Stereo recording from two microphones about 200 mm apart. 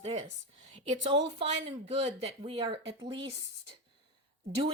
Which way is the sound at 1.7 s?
30° right (ahead or behind).